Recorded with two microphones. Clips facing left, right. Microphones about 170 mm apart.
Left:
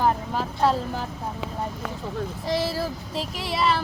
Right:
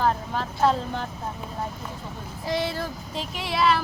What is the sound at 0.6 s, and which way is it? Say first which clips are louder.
Speech: even; 5° left (ahead or behind).